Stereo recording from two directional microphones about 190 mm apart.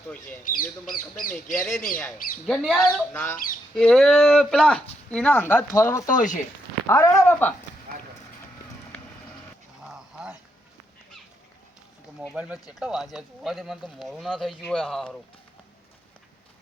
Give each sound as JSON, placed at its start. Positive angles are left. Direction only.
{"t": 0.4, "sound": "speech", "side_deg": 45}
{"t": 1.5, "sound": "speech", "side_deg": 5}
{"t": 2.1, "sound": "speech", "side_deg": 45}
{"t": 2.5, "sound": "speech", "side_deg": 0}
{"t": 6.1, "sound": "speech", "side_deg": 45}
{"t": 6.8, "sound": "speech", "side_deg": 15}
{"t": 9.8, "sound": "a sound", "side_deg": -5}
{"t": 12.3, "sound": "speech", "side_deg": -5}